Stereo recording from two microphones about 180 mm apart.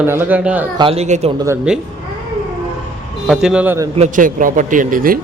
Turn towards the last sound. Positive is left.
turn(degrees=-50)  # may be behind; listen again after turning